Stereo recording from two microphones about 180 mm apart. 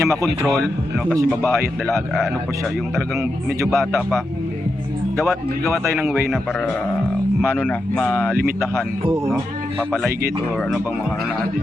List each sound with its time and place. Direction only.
0.0 s speech: 15° right (ahead or behind)
0.4 s a man's voice: centre (ahead or behind)
1.4 s speech: 15° right (ahead or behind)
5.6 s a man's voice: centre (ahead or behind)
7.6 s a man's voice: 5° left (ahead or behind)